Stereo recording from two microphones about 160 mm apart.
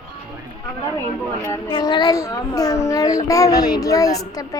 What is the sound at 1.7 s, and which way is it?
A child's voice, 30° left (ahead or behind).